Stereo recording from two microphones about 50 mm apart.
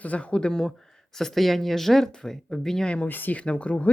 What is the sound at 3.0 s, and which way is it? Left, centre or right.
Speech, left.